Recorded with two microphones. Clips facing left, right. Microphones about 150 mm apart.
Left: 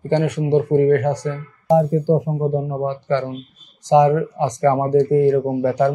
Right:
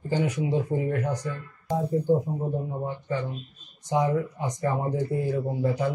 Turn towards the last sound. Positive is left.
turn(degrees=70)  # may be behind; listen again after turning